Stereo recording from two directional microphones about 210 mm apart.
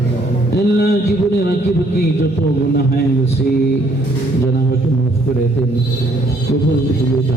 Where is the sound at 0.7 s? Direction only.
50° left (ahead or behind).